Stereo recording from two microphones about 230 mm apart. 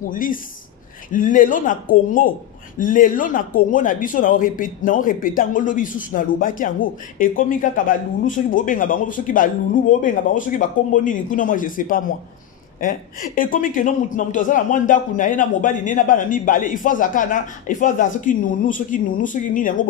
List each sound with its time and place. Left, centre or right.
0.1 s speech: left